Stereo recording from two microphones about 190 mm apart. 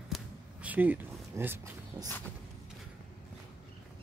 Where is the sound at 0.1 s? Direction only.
5° right (ahead or behind).